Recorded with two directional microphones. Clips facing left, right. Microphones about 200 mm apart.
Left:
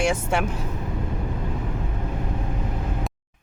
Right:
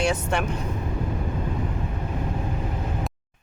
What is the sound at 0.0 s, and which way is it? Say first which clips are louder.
Speech: left 1 dB; 10° left (ahead or behind).